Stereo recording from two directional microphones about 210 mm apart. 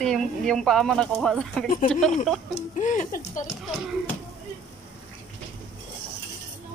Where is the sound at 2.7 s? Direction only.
35° left (ahead or behind).